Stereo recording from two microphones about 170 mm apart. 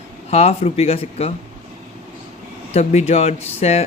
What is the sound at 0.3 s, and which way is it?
A man's voice, 40° left (ahead or behind).